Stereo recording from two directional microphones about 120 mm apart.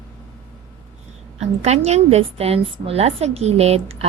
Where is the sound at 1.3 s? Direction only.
70° right (ahead or behind).